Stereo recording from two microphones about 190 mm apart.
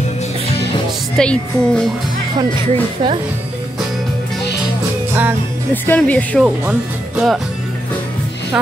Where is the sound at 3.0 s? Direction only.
30° right (ahead or behind).